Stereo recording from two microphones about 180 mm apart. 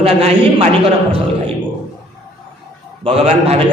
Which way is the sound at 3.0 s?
35° right (ahead or behind).